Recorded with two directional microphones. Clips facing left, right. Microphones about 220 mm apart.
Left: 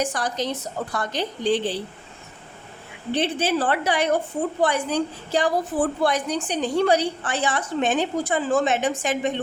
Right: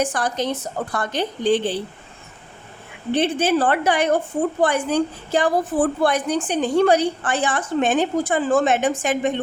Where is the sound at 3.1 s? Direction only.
50° right (ahead or behind).